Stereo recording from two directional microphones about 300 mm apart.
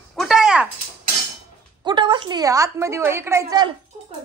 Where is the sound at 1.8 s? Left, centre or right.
Centre.